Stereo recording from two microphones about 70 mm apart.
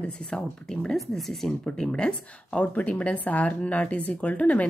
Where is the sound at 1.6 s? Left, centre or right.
Centre.